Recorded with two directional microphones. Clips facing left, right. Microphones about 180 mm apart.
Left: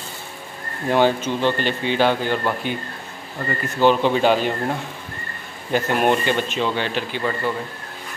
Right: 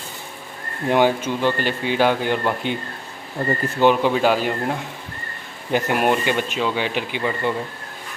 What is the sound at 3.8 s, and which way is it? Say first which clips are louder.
Speech: even; 10° right (ahead or behind).